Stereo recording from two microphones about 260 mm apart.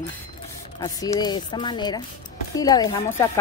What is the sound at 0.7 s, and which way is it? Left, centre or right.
A woman's voice, centre.